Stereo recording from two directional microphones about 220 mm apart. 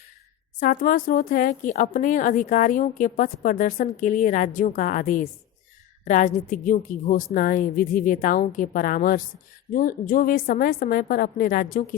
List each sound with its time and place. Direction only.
0.6 s a woman's voice: 40° left (ahead or behind)